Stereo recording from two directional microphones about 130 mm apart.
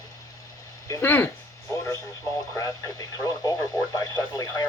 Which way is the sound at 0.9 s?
20° left (ahead or behind).